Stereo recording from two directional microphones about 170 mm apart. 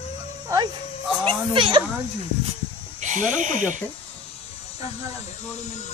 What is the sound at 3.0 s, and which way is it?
Speech, 45° right (ahead or behind).